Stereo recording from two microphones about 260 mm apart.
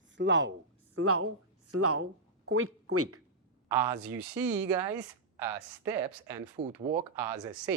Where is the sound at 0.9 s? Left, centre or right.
Right.